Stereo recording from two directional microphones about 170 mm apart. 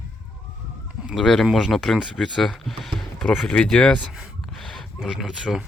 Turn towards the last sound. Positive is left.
turn(degrees=0)  # may be behind; listen again after turning